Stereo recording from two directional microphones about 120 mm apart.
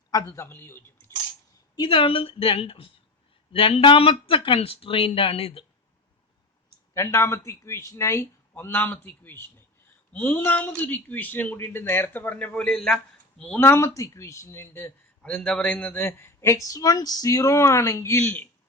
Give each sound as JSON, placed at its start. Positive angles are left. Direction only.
{"t": 0.1, "sound": "speech", "side_deg": 30}
{"t": 1.7, "sound": "speech", "side_deg": 40}
{"t": 6.9, "sound": "speech", "side_deg": 20}
{"t": 13.6, "sound": "speech", "side_deg": 20}